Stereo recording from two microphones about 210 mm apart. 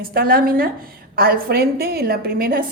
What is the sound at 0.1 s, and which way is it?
A woman's voice, 45° right (ahead or behind).